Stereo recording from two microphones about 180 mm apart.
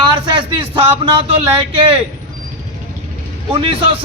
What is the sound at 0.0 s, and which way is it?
Speech, 25° right (ahead or behind).